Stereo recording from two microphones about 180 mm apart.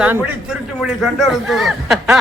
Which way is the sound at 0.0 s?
10° right (ahead or behind).